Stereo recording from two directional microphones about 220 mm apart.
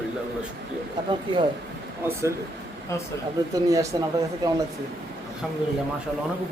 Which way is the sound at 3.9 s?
20° right (ahead or behind).